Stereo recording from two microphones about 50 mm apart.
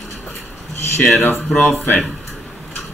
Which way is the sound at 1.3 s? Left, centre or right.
Left.